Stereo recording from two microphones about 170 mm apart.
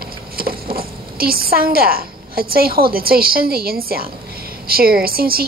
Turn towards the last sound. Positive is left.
turn(degrees=-60)  # may be behind; listen again after turning